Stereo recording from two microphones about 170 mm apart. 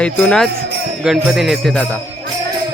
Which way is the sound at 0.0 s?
5° left (ahead or behind).